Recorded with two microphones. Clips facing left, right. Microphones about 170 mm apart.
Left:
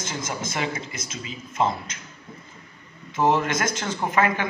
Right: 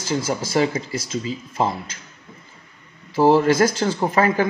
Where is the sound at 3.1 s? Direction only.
30° right (ahead or behind).